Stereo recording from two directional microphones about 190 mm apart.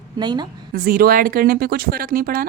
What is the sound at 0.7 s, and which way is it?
Speech, 50° right (ahead or behind).